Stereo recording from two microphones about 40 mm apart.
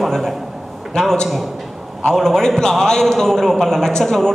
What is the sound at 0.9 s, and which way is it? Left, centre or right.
A man's voice, centre.